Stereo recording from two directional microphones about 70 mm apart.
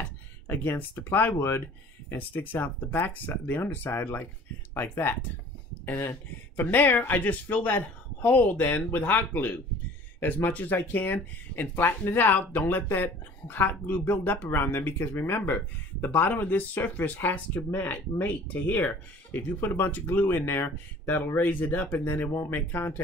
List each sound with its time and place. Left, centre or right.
0.5 s speech: left